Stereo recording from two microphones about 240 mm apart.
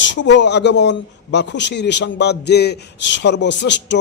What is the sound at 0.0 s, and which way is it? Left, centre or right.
Speech, left.